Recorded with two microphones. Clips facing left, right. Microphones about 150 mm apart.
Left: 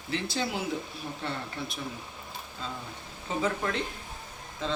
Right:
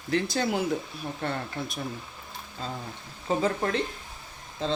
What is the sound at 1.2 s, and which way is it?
Speech, 55° right (ahead or behind).